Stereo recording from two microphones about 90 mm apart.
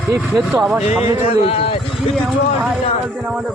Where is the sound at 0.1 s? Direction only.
30° right (ahead or behind).